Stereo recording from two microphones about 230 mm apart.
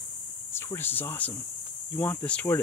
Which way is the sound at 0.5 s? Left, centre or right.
Centre.